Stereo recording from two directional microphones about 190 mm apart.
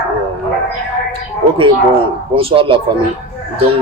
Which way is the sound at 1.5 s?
30° right (ahead or behind).